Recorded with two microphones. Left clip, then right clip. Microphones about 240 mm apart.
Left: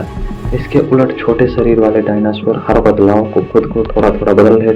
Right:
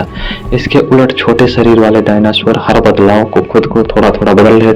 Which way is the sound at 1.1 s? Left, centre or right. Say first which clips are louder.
Right 4 dB; right.